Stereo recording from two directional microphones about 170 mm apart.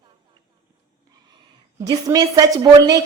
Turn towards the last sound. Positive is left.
turn(degrees=-20)  # may be behind; listen again after turning